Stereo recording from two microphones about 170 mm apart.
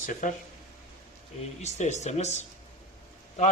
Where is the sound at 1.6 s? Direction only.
40° left (ahead or behind).